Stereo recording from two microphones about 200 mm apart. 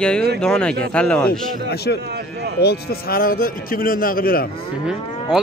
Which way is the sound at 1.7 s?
55° left (ahead or behind).